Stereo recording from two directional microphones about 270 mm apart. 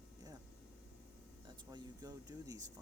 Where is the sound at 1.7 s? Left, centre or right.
Centre.